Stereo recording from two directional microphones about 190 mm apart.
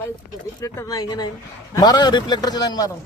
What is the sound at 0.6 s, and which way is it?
A man's voice, 15° left (ahead or behind).